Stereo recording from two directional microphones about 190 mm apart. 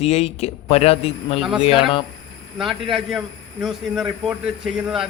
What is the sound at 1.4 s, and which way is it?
Speech, 5° right (ahead or behind).